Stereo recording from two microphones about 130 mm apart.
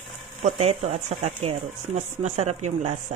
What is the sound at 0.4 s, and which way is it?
Speech, 55° right (ahead or behind).